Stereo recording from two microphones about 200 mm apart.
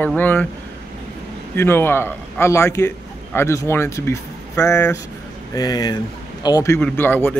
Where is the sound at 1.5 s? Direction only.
10° left (ahead or behind).